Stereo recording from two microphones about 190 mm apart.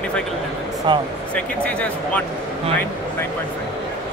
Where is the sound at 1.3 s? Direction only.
5° left (ahead or behind).